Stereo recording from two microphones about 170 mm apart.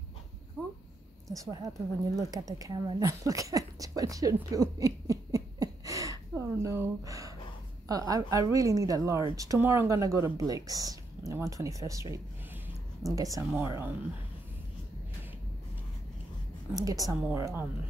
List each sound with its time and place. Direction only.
1.3 s speech: 20° right (ahead or behind)
16.7 s speech: 20° right (ahead or behind)